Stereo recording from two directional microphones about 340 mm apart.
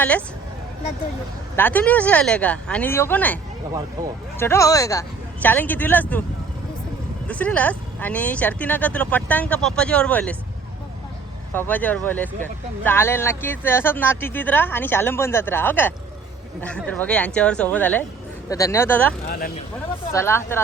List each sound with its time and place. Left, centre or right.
1.5 s speech: centre
4.4 s speech: centre
7.3 s speech: centre
11.5 s speech: centre
19.3 s speech: left
20.1 s speech: centre